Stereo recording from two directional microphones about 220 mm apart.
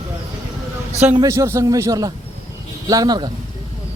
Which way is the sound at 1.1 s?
15° right (ahead or behind).